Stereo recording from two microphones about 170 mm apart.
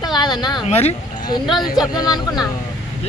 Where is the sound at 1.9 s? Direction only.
25° left (ahead or behind).